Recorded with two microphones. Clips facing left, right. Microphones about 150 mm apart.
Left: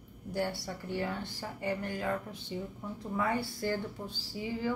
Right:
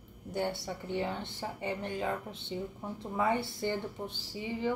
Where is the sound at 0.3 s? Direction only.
20° right (ahead or behind).